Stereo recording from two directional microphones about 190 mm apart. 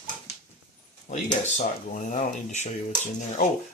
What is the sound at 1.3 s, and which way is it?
Speech, 40° left (ahead or behind).